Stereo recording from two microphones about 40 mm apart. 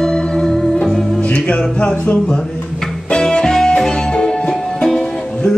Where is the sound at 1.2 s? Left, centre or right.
Left.